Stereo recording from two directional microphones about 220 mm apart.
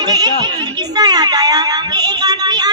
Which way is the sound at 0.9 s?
20° right (ahead or behind).